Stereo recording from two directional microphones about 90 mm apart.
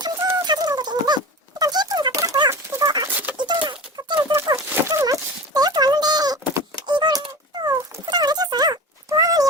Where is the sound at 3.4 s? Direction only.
55° right (ahead or behind).